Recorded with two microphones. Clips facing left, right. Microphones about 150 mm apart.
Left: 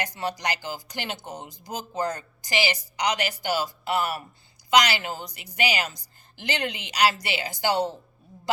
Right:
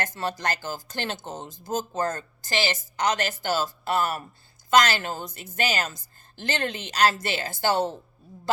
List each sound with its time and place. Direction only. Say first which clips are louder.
0.2 s speech: even; 15° left (ahead or behind)
5.2 s speech: right 3 dB; 50° right (ahead or behind)
5.5 s speech: even; 15° left (ahead or behind)